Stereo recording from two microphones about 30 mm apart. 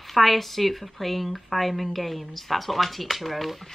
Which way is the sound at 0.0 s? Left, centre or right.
Centre.